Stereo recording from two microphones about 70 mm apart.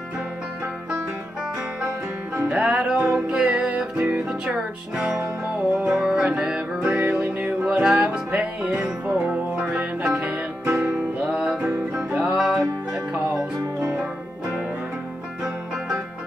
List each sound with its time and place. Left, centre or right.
2.5 s music: centre